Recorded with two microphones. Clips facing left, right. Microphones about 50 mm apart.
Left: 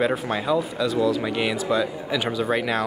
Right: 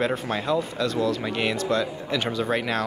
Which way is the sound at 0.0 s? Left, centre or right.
Centre.